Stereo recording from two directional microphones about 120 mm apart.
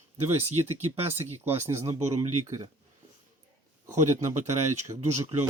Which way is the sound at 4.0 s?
70° right (ahead or behind).